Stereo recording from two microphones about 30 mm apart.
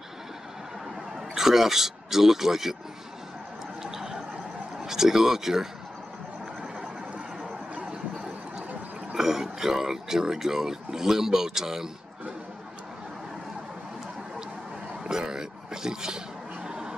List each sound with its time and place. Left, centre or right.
1.3 s speech: centre
3.8 s a sound: centre
4.8 s speech: centre
9.1 s speech: centre
15.0 s speech: right
16.6 s a sound: right